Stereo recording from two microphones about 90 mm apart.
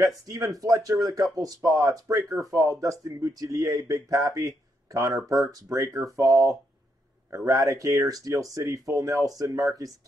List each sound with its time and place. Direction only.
0.0 s speech: 40° right (ahead or behind)